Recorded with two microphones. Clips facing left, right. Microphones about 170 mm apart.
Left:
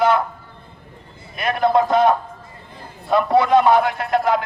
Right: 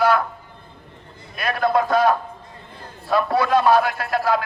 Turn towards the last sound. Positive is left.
turn(degrees=20)  # may be behind; listen again after turning